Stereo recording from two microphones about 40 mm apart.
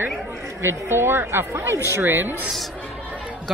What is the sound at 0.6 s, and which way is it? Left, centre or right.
Speech, right.